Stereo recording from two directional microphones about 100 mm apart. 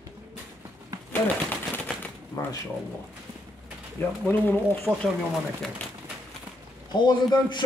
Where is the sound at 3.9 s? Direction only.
20° left (ahead or behind).